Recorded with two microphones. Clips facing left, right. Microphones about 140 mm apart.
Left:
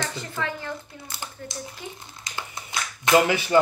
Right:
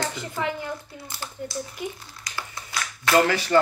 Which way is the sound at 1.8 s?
15° right (ahead or behind).